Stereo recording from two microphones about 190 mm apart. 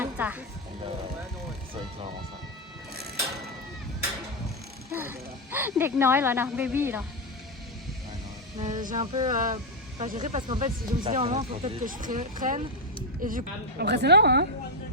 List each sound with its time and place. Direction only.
0.0 s music: 10° right (ahead or behind)
4.9 s speech: 10° right (ahead or behind)
8.6 s speech: 40° right (ahead or behind)
9.0 s a sound: 25° right (ahead or behind)
9.3 s speech: 45° right (ahead or behind)
13.2 s a woman's voice: 50° right (ahead or behind)